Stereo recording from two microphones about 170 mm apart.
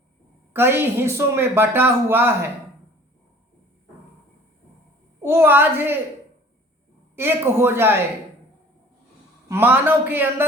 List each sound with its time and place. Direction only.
0.5 s speech: 15° right (ahead or behind)
5.2 s speech: 15° right (ahead or behind)
7.2 s speech: 15° right (ahead or behind)
9.5 s speech: 15° right (ahead or behind)